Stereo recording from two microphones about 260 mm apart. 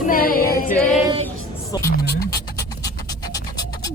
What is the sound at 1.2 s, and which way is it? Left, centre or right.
Music, centre.